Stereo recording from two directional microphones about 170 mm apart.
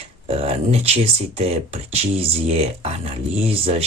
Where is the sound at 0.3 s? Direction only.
35° right (ahead or behind).